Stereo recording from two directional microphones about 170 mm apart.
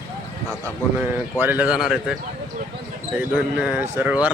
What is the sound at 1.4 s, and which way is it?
Speech, 10° right (ahead or behind).